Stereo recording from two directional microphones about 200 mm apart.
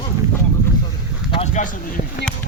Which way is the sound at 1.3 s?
35° left (ahead or behind).